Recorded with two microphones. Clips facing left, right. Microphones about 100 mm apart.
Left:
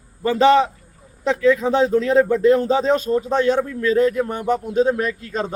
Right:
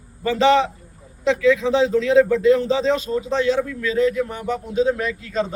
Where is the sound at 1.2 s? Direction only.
45° left (ahead or behind).